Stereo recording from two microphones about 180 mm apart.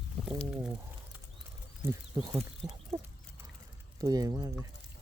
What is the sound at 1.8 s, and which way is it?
Speech, 20° right (ahead or behind).